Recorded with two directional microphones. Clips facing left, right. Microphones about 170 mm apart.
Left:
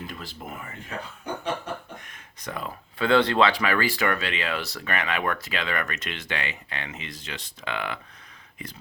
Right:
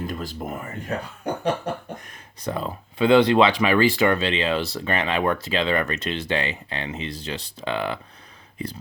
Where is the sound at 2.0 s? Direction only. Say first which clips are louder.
Right 3 dB; 35° right (ahead or behind).